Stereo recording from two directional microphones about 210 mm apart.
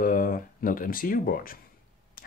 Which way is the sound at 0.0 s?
40° left (ahead or behind).